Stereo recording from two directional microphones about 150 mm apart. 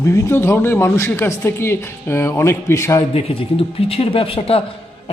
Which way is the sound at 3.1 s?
40° left (ahead or behind).